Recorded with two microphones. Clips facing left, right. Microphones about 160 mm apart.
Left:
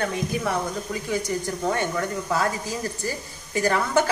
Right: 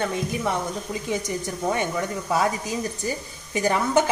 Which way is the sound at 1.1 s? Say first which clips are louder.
Left 2 dB; 20° right (ahead or behind).